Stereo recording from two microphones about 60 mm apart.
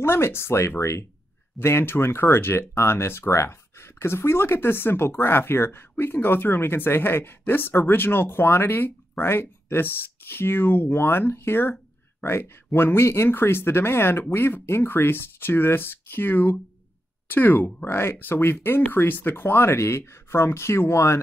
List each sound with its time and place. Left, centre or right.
0.0 s speech: left
17.8 s speech: left